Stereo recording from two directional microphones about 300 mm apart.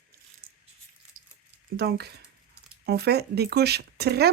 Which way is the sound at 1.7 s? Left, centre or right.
Right.